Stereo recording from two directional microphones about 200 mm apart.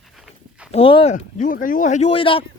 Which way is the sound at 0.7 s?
30° left (ahead or behind).